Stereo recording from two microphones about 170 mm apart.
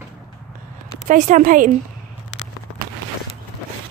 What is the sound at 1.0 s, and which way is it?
Speech, 45° right (ahead or behind).